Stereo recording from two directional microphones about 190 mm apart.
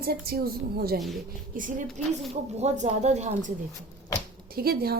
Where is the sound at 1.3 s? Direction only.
45° right (ahead or behind).